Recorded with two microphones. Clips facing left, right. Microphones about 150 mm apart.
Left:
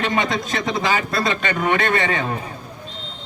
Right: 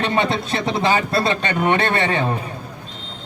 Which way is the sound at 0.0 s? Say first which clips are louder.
Right 2 dB; 30° right (ahead or behind).